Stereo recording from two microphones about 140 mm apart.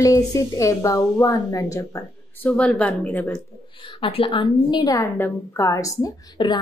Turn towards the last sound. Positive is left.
turn(degrees=30)  # may be behind; listen again after turning